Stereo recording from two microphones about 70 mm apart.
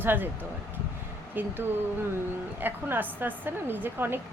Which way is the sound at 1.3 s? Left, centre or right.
Right.